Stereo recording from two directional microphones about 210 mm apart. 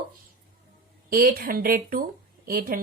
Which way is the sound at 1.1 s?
45° right (ahead or behind).